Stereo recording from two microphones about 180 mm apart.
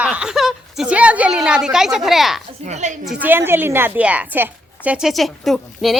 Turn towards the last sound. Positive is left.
turn(degrees=0)  # may be behind; listen again after turning